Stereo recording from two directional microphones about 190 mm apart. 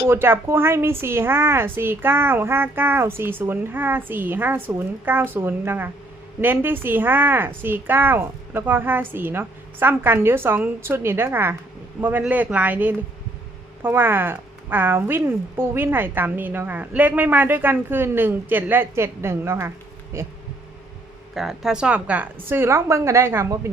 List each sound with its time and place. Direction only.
0.1 s speech: 10° right (ahead or behind)
21.3 s speech: centre (ahead or behind)